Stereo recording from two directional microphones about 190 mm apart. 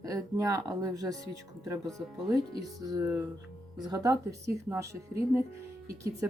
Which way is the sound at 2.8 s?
15° right (ahead or behind).